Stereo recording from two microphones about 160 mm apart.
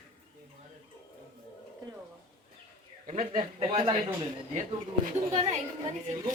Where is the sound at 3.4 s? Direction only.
35° right (ahead or behind).